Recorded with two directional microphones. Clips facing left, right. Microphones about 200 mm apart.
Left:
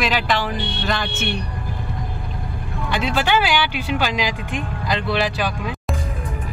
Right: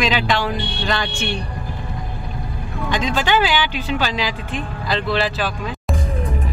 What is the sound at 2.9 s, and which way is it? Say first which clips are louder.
Speech: right 1 dB; 10° left (ahead or behind).